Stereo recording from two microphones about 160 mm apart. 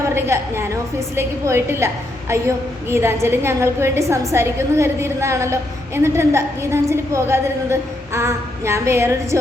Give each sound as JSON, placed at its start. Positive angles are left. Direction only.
{"t": 0.0, "sound": "a woman's voice", "side_deg": -15}
{"t": 2.9, "sound": "a woman's voice", "side_deg": -15}